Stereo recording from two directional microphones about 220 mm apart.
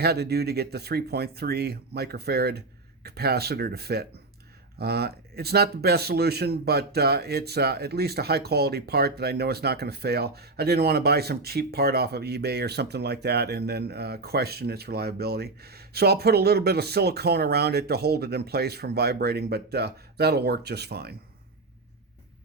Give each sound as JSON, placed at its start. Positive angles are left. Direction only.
{"t": 0.0, "sound": "speech", "side_deg": -45}